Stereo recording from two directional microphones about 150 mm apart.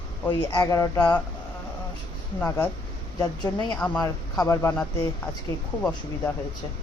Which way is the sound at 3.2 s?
30° left (ahead or behind).